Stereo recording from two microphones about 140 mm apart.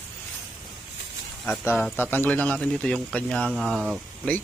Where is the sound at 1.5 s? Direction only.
15° left (ahead or behind).